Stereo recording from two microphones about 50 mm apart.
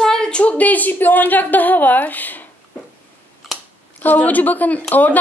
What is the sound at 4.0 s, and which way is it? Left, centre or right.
Speech, left.